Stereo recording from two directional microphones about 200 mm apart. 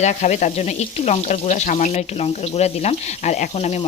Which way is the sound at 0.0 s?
35° left (ahead or behind).